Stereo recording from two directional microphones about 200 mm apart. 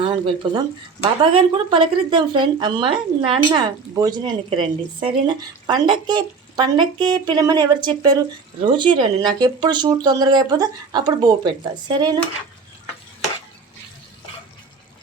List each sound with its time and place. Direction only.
0.0 s speech: 20° right (ahead or behind)